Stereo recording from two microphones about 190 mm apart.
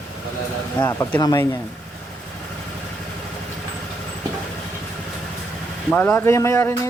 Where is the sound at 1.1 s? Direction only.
20° left (ahead or behind).